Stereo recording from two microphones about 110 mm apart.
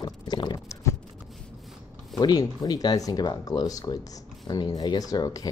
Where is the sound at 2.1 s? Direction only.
35° left (ahead or behind).